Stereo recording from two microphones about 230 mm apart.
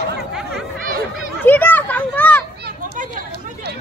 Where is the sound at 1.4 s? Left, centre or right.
Centre.